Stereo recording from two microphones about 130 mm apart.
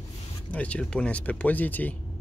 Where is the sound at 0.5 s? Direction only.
10° left (ahead or behind).